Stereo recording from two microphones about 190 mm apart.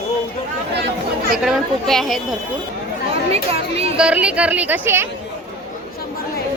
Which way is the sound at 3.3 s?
30° right (ahead or behind).